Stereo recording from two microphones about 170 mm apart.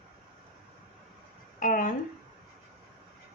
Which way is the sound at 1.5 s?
55° left (ahead or behind).